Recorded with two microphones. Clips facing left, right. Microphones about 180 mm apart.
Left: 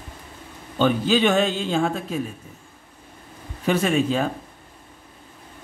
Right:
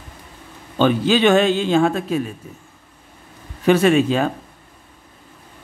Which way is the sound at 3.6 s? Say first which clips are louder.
Right 6 dB; 75° right (ahead or behind).